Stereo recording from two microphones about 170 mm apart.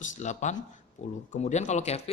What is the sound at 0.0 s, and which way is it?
A man's voice, 45° left (ahead or behind).